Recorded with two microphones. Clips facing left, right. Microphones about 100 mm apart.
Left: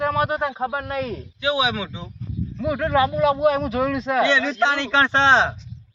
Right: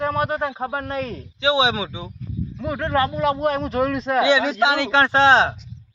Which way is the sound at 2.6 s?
5° left (ahead or behind).